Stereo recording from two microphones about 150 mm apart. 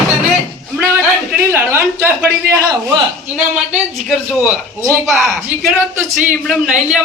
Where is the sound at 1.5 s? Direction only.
15° right (ahead or behind).